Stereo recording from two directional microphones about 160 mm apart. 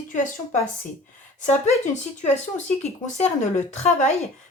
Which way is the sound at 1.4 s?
50° left (ahead or behind).